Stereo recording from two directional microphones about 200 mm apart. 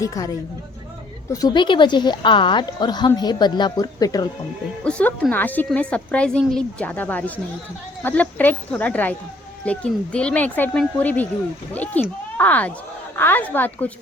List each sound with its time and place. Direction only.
0.0 s a woman's voice: 15° left (ahead or behind)
1.3 s a woman's voice: 20° left (ahead or behind)
4.8 s a woman's voice: 5° left (ahead or behind)